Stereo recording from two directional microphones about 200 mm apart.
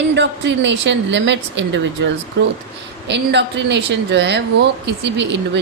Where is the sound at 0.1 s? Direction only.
60° right (ahead or behind).